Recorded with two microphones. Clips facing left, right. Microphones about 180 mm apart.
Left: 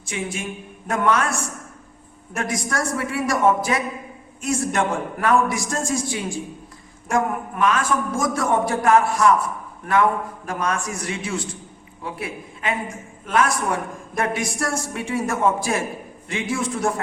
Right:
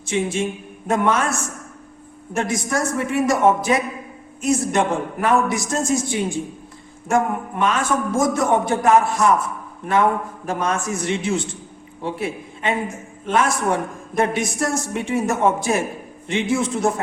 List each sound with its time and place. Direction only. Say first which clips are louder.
0.0 s a man's voice: right 7 dB; 25° right (ahead or behind)